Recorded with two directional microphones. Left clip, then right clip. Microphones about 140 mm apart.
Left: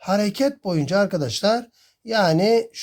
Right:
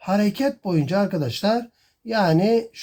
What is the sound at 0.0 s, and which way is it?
Speech, 50° left (ahead or behind).